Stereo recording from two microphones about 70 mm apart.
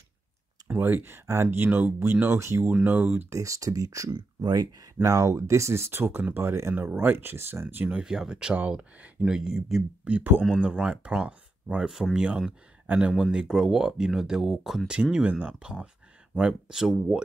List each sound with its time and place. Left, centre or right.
0.7 s speech: right
2.6 s speech: right
3.3 s speech: right
5.0 s speech: right
6.7 s speech: right
7.0 s speech: right
8.0 s speech: centre
10.0 s speech: right
11.9 s speech: centre
14.9 s speech: centre